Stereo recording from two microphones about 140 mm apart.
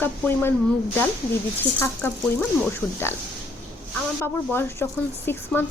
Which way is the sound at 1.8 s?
15° left (ahead or behind).